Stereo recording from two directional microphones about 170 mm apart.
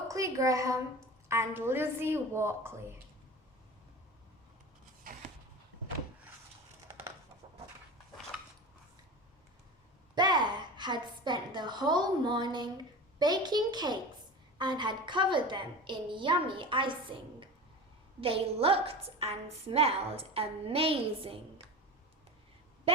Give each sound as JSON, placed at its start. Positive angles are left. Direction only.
{"t": 0.1, "sound": "a woman's voice", "side_deg": -20}
{"t": 10.2, "sound": "a woman's voice", "side_deg": -25}